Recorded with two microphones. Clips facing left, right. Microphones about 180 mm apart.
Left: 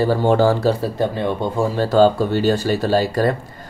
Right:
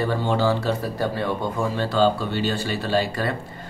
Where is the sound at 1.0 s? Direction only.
20° left (ahead or behind).